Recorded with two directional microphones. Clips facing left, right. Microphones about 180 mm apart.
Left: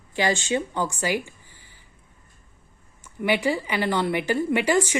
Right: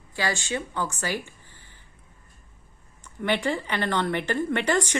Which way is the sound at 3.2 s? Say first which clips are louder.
Left 3 dB; 10° left (ahead or behind).